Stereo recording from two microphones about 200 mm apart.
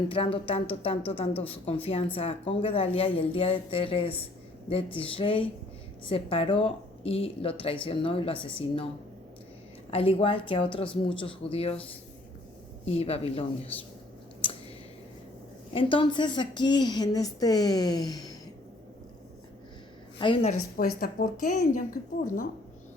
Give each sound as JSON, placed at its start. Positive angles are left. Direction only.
{"t": 0.1, "sound": "speech", "side_deg": 25}
{"t": 9.9, "sound": "speech", "side_deg": 25}
{"t": 12.8, "sound": "speech", "side_deg": 30}
{"t": 15.7, "sound": "speech", "side_deg": 25}
{"t": 20.1, "sound": "speech", "side_deg": 25}
{"t": 20.7, "sound": "a woman's voice", "side_deg": 45}